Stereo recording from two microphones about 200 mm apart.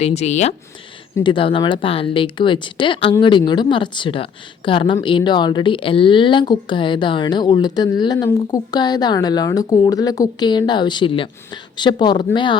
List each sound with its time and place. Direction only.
0.0 s speech: 30° left (ahead or behind)